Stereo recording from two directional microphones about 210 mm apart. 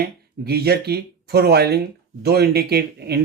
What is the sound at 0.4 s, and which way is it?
Speech, 50° right (ahead or behind).